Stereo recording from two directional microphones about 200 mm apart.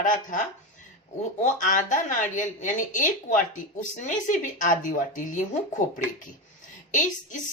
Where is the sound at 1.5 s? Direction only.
40° left (ahead or behind).